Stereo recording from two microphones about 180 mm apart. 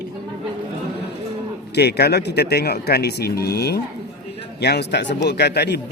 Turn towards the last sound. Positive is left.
turn(degrees=65)  # may be behind; listen again after turning